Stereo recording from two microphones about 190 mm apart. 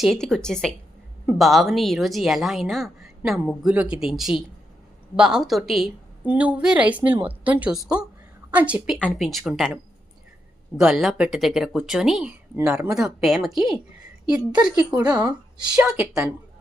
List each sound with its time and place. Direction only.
0.0 s speech: centre (ahead or behind)
9.0 s speech: 5° left (ahead or behind)
10.8 s speech: centre (ahead or behind)
14.9 s speech: 20° right (ahead or behind)